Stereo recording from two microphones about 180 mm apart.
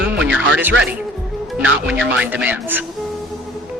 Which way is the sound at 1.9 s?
5° right (ahead or behind).